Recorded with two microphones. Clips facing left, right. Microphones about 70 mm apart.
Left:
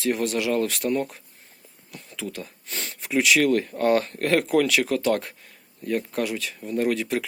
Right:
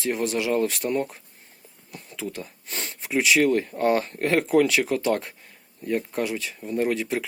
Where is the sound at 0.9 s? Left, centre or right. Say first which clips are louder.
Even; right.